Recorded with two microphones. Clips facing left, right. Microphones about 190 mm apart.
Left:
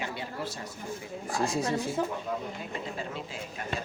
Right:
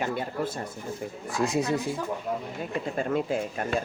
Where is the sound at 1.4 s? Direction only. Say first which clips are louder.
Right 4 dB; 20° right (ahead or behind).